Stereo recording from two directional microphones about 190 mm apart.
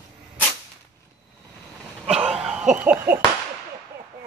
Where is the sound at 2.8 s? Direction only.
10° right (ahead or behind).